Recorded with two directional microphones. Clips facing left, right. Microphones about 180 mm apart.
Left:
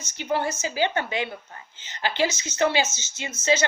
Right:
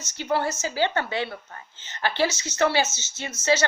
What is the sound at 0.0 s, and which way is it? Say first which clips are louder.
A woman's voice: right 1 dB; 20° left (ahead or behind).